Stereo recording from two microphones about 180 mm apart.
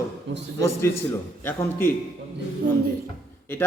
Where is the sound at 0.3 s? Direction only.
80° right.